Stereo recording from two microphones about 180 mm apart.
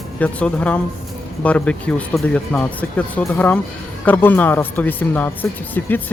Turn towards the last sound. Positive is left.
turn(degrees=10)  # may be behind; listen again after turning